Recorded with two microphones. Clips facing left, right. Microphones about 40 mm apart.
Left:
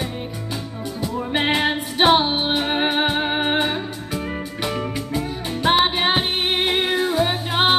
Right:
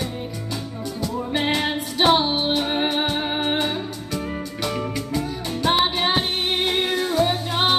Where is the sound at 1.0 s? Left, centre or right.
Left.